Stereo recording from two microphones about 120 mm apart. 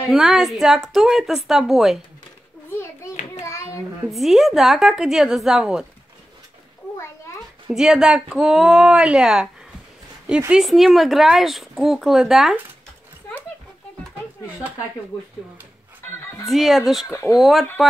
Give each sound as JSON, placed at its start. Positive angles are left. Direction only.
{"t": 0.1, "sound": "speech", "side_deg": 0}
{"t": 4.1, "sound": "speech", "side_deg": 0}
{"t": 7.7, "sound": "speech", "side_deg": -5}
{"t": 10.5, "sound": "speech", "side_deg": 0}
{"t": 16.2, "sound": "music", "side_deg": 20}
{"t": 16.4, "sound": "speech", "side_deg": 0}
{"t": 17.1, "sound": "speech", "side_deg": 25}
{"t": 17.4, "sound": "speech", "side_deg": 0}